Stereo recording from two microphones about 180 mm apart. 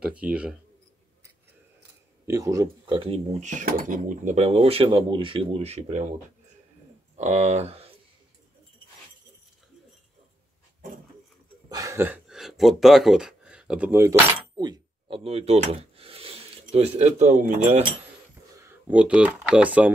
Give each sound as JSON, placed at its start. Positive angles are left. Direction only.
{"t": 0.0, "sound": "speech", "side_deg": -5}
{"t": 2.2, "sound": "speech", "side_deg": -15}
{"t": 7.2, "sound": "speech", "side_deg": -35}
{"t": 11.7, "sound": "a sound", "side_deg": -15}
{"t": 12.3, "sound": "speech", "side_deg": 0}
{"t": 18.6, "sound": "speech", "side_deg": -10}